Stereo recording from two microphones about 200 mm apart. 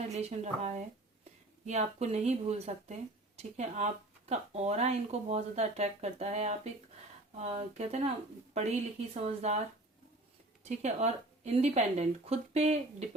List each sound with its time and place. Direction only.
0.1 s speech: 35° right (ahead or behind)
9.1 s speech: 35° right (ahead or behind)